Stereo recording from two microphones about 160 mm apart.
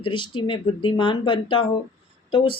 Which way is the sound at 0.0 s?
30° left (ahead or behind).